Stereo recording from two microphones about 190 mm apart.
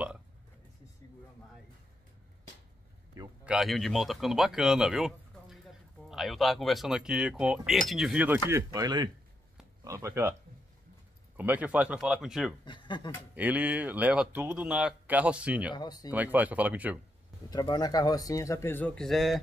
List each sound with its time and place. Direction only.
3.4 s speech: centre (ahead or behind)
8.5 s speech: 15° right (ahead or behind)
11.3 s speech: 10° right (ahead or behind)
12.6 s speech: 25° left (ahead or behind)
13.3 s speech: 10° right (ahead or behind)
15.7 s speech: 20° left (ahead or behind)
16.1 s speech: 10° right (ahead or behind)
17.5 s speech: 20° left (ahead or behind); by 19.4 s centre (ahead or behind)